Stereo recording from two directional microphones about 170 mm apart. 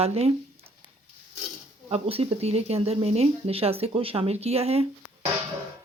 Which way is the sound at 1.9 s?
35° right (ahead or behind).